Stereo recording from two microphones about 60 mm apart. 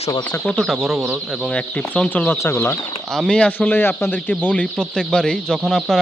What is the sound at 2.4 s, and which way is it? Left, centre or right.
Speech, left.